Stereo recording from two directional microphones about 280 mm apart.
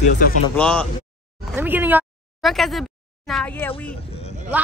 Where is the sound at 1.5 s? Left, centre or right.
Centre.